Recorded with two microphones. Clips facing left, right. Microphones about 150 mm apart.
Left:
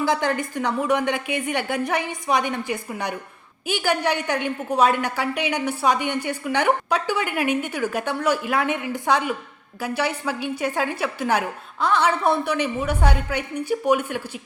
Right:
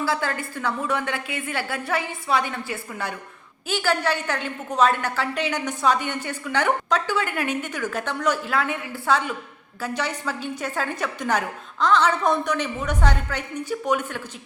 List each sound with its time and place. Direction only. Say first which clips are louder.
0.0 s a woman's voice: left 4 dB; 20° left (ahead or behind)